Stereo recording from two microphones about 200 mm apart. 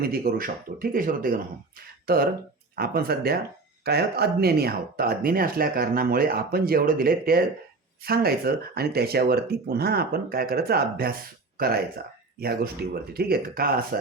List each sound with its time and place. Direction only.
0.0 s speech: 50° right (ahead or behind)